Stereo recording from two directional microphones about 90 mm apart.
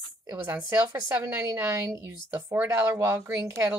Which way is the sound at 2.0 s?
20° right (ahead or behind).